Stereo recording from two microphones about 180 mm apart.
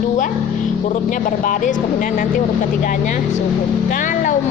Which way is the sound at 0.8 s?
45° left (ahead or behind).